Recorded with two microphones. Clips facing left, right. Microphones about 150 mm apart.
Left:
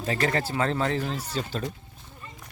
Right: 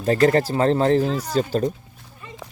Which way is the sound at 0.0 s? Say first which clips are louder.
Right 9 dB; 35° right (ahead or behind).